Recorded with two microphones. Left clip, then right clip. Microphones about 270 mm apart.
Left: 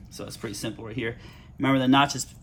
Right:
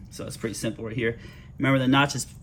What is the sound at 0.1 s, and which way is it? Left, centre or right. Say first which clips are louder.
Speech: right 3 dB; centre.